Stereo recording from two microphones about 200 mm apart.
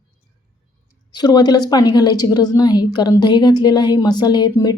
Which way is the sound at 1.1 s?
20° left (ahead or behind).